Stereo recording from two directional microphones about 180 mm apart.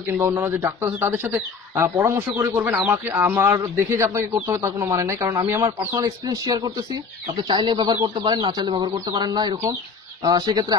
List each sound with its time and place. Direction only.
0.2 s a man's voice: 15° right (ahead or behind)